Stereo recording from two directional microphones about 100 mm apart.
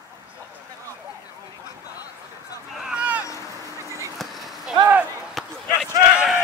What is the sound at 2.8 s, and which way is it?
Vehicle, 10° right (ahead or behind).